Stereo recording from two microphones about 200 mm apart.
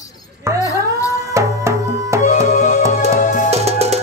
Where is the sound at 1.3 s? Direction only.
15° right (ahead or behind).